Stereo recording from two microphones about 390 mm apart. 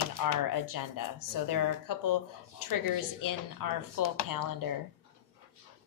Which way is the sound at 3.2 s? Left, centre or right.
Left.